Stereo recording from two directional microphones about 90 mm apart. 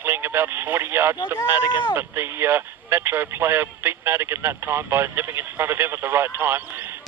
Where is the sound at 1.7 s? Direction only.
65° left (ahead or behind).